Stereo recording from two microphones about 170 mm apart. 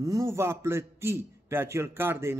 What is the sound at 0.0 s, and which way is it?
A man's voice, 20° right (ahead or behind).